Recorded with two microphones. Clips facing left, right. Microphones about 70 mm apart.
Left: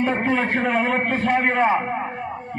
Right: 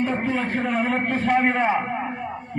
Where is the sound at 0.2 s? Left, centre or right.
Left.